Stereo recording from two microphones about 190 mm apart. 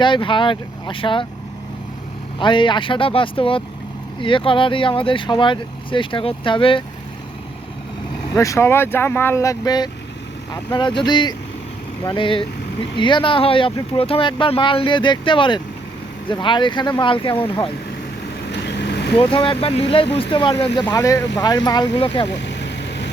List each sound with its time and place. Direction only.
0.0 s speech: 25° left (ahead or behind)
2.4 s speech: 25° left (ahead or behind)
8.4 s speech: 15° left (ahead or behind)
18.4 s vehicle: 65° left (ahead or behind)
19.2 s speech: 25° left (ahead or behind)
22.3 s vehicle: 65° left (ahead or behind)